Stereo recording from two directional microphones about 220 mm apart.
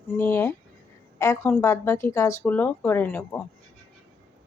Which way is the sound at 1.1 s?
10° left (ahead or behind).